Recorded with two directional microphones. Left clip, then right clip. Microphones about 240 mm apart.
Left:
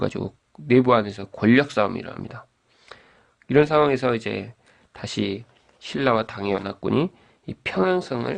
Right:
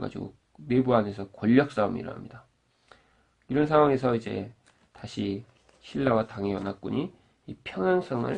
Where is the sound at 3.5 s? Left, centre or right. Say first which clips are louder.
Left 4 dB; left.